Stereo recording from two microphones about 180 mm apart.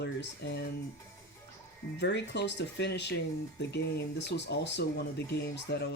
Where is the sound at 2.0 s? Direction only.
75° left (ahead or behind).